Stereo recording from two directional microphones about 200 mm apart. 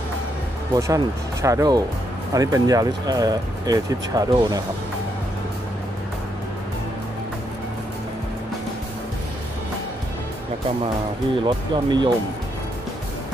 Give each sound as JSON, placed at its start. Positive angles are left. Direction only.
{"t": 0.7, "sound": "speech", "side_deg": -15}
{"t": 11.4, "sound": "speech", "side_deg": -25}